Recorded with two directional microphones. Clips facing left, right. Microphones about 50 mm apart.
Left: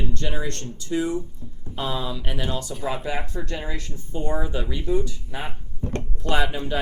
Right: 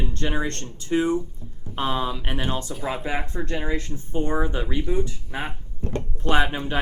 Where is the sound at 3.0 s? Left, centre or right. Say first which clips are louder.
Right 1 dB; right.